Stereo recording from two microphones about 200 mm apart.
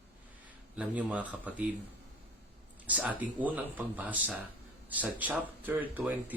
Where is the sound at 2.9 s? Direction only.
5° right (ahead or behind).